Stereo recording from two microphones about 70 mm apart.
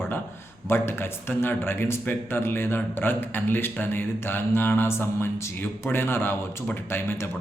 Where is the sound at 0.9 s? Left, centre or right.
Left.